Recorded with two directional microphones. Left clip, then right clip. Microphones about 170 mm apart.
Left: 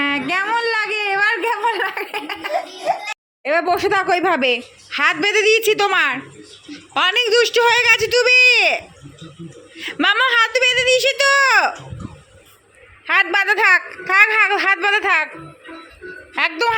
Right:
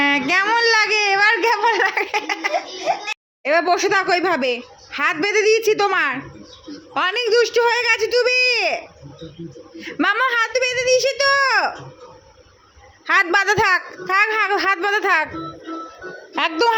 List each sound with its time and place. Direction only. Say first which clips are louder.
0.0 s baby cry: right 2 dB; 10° right (ahead or behind)
2.8 s a woman's voice: left 1 dB; 5° left (ahead or behind)
13.1 s a man's voice: even; 20° right (ahead or behind)
16.3 s a woman's voice: even; 25° right (ahead or behind)